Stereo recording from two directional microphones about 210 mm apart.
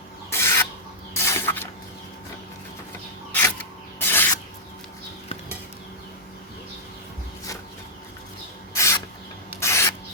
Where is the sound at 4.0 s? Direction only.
10° left (ahead or behind).